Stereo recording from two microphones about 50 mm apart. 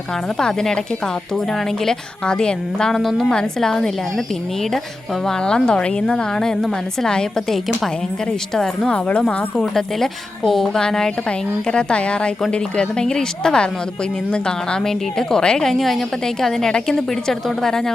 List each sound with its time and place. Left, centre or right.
0.3 s a woman's voice: centre
5.2 s a woman's voice: centre
8.9 s a woman's voice: left
9.6 s a woman's voice: centre
10.8 s a woman's voice: centre